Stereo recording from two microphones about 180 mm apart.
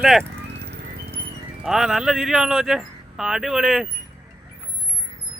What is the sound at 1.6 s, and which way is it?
Speech, centre (ahead or behind).